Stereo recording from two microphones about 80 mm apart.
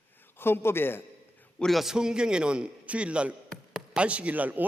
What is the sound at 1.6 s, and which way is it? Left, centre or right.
A man's voice, centre.